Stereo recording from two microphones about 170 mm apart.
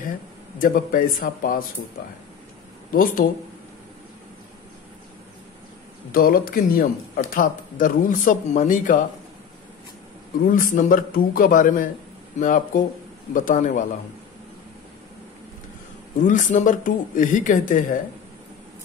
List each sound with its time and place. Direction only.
0.6 s speech: 55° left (ahead or behind)
2.9 s speech: 55° left (ahead or behind)
6.1 s speech: 60° left (ahead or behind)
10.4 s speech: 55° left (ahead or behind)
16.2 s speech: 50° left (ahead or behind)